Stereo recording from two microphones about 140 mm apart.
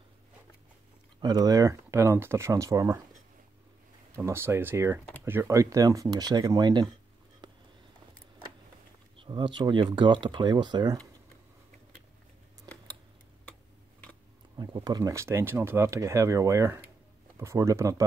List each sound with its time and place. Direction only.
1.2 s speech: 25° right (ahead or behind)
4.1 s speech: 15° right (ahead or behind)
9.2 s speech: 35° right (ahead or behind)
14.6 s speech: 30° right (ahead or behind)